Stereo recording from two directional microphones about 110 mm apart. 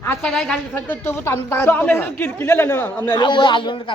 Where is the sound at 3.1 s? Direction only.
45° left (ahead or behind).